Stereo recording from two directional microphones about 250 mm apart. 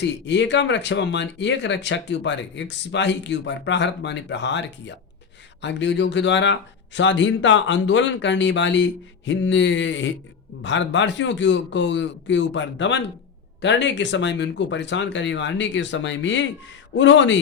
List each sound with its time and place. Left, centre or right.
0.0 s speech: left